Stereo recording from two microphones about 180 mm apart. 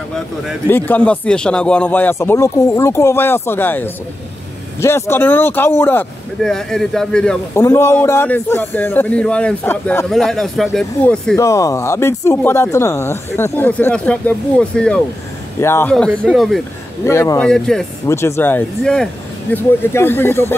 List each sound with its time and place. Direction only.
0.7 s speech: 10° left (ahead or behind)
11.3 s speech: 15° left (ahead or behind); by 16.6 s centre (ahead or behind)
17.0 s speech: 15° left (ahead or behind)
17.5 s speech: 5° left (ahead or behind)
18.0 s speech: 15° left (ahead or behind)